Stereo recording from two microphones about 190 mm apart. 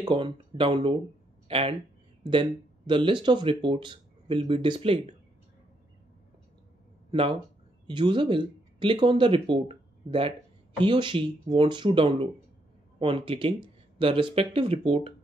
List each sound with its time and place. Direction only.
0.0 s speech: 30° right (ahead or behind)
2.9 s speech: 25° right (ahead or behind)
7.1 s speech: 30° right (ahead or behind)